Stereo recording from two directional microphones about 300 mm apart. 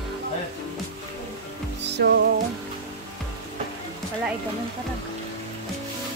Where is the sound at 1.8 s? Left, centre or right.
Right.